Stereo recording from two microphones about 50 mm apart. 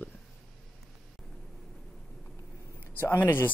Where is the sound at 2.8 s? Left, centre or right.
Left.